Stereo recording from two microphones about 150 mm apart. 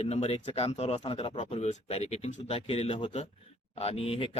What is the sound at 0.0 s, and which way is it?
A man's voice, 45° left (ahead or behind).